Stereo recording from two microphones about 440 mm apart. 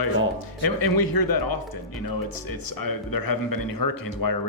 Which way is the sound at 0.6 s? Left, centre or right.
Left.